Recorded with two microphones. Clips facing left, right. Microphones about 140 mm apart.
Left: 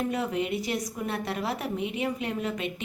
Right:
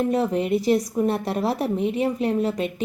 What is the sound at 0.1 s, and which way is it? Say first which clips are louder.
A woman's voice: right 7 dB; 35° right (ahead or behind).